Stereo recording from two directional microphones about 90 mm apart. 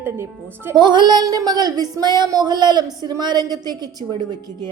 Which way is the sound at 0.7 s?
55° right (ahead or behind).